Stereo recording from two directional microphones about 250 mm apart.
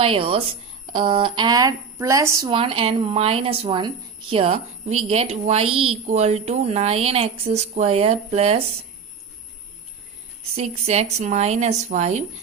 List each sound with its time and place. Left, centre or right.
0.0 s speech: right
10.5 s speech: right